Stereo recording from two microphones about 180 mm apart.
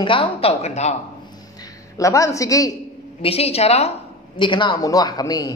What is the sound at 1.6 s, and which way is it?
A woman's voice, 20° left (ahead or behind).